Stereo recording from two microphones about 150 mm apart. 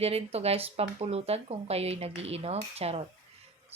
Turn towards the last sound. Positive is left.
turn(degrees=-45)  # may be behind; listen again after turning